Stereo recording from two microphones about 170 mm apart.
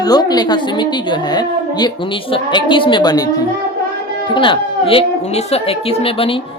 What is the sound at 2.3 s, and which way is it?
Speech, 30° left (ahead or behind).